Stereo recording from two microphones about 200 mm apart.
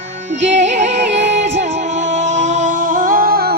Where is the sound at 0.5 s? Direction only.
35° right (ahead or behind).